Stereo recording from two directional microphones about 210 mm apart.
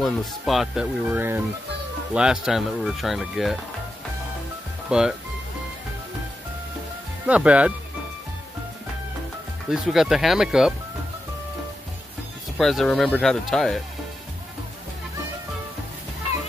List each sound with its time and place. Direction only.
0.0 s speech: centre (ahead or behind)
4.8 s speech: 5° right (ahead or behind)
7.2 s speech: 5° right (ahead or behind)
9.7 s speech: centre (ahead or behind)
12.5 s speech: centre (ahead or behind)